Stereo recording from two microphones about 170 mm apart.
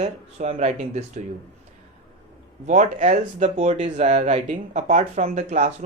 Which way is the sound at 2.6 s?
45° right (ahead or behind).